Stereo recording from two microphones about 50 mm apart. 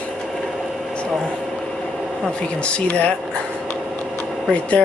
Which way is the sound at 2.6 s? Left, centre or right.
Left.